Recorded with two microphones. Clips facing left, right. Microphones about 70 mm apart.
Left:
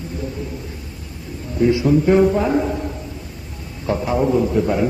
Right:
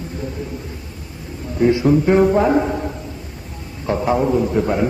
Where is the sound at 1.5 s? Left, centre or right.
Right.